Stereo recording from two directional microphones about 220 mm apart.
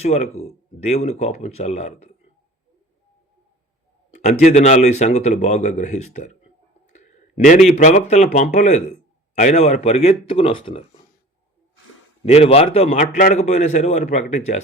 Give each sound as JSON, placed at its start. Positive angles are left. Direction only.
{"t": 0.0, "sound": "a man's voice", "side_deg": 30}
{"t": 4.1, "sound": "a man's voice", "side_deg": 35}
{"t": 6.9, "sound": "a sound", "side_deg": 30}
{"t": 7.8, "sound": "a man's voice", "side_deg": 35}
{"t": 12.2, "sound": "a man's voice", "side_deg": 30}